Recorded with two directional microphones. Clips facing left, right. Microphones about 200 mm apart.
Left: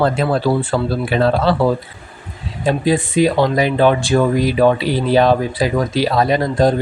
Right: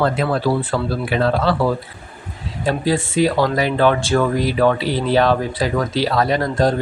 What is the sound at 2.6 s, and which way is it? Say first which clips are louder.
Speech: left 3 dB; 20° left (ahead or behind).